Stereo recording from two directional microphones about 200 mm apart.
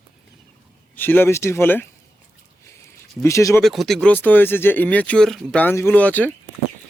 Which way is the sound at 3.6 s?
Centre (ahead or behind).